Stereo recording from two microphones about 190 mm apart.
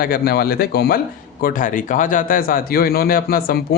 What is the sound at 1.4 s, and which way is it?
A man's voice, 45° left (ahead or behind).